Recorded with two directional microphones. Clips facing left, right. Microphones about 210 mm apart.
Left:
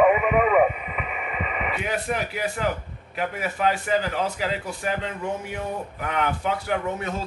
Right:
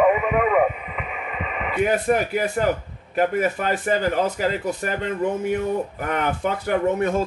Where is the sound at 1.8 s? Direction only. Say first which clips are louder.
Right 9 dB; 50° right (ahead or behind).